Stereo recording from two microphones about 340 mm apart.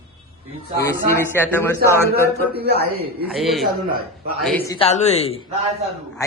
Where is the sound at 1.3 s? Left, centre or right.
Centre.